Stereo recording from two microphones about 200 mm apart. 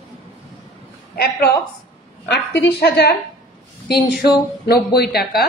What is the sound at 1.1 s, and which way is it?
A woman's voice, 50° left (ahead or behind).